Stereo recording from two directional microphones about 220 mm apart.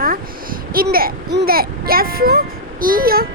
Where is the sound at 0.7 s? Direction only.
40° right (ahead or behind).